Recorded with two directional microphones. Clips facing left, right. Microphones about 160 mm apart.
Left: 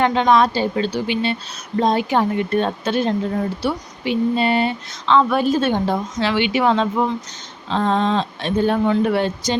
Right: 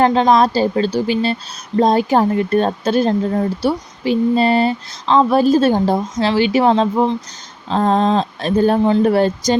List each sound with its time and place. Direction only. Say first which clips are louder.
0.0 s speech: right 3 dB; 35° right (ahead or behind)